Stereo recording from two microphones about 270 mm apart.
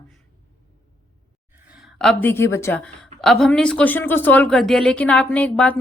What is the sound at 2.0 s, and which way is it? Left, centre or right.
A woman's voice, centre.